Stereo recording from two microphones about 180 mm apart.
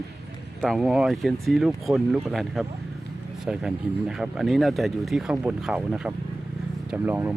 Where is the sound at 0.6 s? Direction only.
Centre (ahead or behind).